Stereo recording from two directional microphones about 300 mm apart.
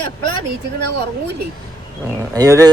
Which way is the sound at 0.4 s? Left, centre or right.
Right.